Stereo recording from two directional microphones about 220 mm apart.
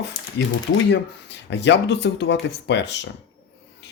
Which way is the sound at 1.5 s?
50° left (ahead or behind).